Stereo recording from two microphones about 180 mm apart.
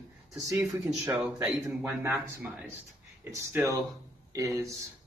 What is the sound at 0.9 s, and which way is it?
Speech, 5° right (ahead or behind).